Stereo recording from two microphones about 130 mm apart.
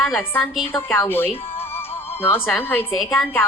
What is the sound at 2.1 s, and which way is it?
Speech, 15° left (ahead or behind).